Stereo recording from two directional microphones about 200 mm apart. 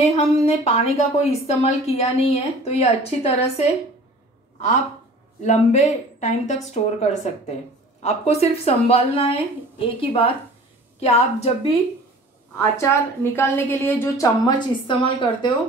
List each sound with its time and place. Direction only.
0.0 s a woman's voice: 30° left (ahead or behind)
5.4 s a woman's voice: 35° left (ahead or behind)
12.5 s a woman's voice: 10° left (ahead or behind)